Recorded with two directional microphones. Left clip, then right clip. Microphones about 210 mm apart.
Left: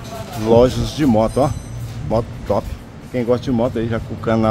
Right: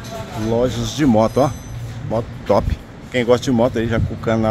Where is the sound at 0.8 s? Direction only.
Centre (ahead or behind).